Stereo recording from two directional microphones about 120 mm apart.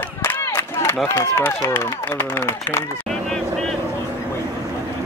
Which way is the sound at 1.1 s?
20° left (ahead or behind).